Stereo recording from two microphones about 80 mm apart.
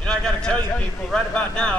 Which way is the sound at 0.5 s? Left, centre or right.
Left.